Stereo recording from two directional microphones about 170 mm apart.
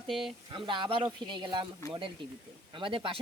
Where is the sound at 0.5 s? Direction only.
30° right (ahead or behind).